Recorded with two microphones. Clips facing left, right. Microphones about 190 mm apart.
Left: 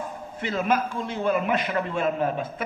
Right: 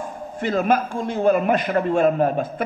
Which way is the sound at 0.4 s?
45° right (ahead or behind).